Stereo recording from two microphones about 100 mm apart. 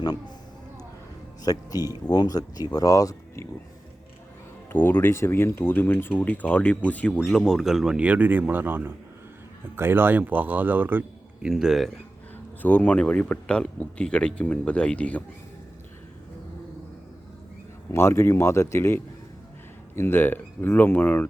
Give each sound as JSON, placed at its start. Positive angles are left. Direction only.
{"t": 1.5, "sound": "speech", "side_deg": 40}
{"t": 4.7, "sound": "speech", "side_deg": 20}
{"t": 7.1, "sound": "speech", "side_deg": 5}
{"t": 11.4, "sound": "speech", "side_deg": -5}
{"t": 12.6, "sound": "speech", "side_deg": 15}
{"t": 17.9, "sound": "speech", "side_deg": 25}